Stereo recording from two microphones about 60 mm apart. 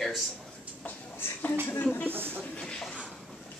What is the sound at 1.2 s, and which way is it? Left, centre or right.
Speech, left.